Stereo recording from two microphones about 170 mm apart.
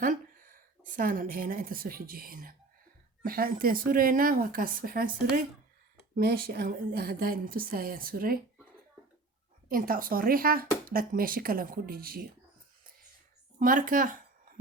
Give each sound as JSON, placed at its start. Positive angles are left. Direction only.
{"t": 0.0, "sound": "speech", "side_deg": -55}
{"t": 9.6, "sound": "speech", "side_deg": -55}
{"t": 13.6, "sound": "speech", "side_deg": -55}